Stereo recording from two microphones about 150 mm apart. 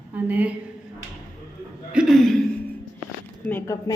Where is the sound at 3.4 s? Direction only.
20° left (ahead or behind).